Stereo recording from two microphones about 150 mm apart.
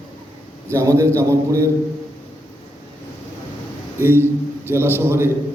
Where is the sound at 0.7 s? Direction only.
20° right (ahead or behind).